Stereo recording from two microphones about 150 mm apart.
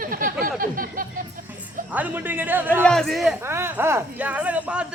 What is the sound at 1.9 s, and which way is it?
Speech, 10° right (ahead or behind).